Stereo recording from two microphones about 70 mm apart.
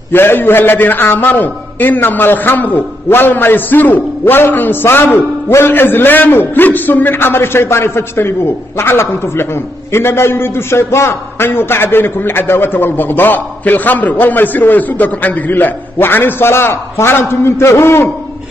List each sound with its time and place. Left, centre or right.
0.1 s a man's voice: left